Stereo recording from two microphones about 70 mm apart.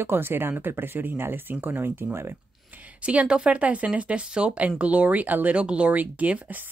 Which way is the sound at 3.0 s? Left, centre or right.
Centre.